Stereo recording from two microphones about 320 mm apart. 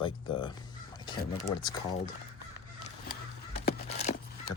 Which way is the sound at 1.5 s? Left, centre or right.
Centre.